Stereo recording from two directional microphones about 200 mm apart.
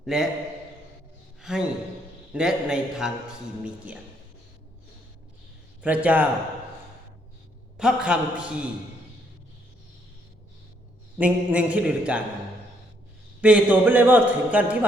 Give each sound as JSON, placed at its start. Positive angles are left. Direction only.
{"t": 0.0, "sound": "a man's voice", "side_deg": 0}
{"t": 1.4, "sound": "gasp", "side_deg": -5}
{"t": 2.3, "sound": "a man's voice", "side_deg": -5}
{"t": 5.8, "sound": "a man's voice", "side_deg": -5}
{"t": 7.8, "sound": "a man's voice", "side_deg": -5}
{"t": 11.2, "sound": "a man's voice", "side_deg": -5}
{"t": 13.4, "sound": "a man's voice", "side_deg": -5}